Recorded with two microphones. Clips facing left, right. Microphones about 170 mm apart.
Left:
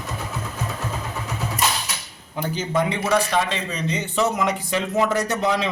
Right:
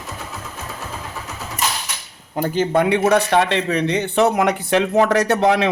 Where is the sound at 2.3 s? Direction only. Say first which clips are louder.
Right 6 dB; 50° right (ahead or behind).